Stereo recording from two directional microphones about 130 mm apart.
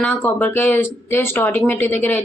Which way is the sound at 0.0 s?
10° left (ahead or behind).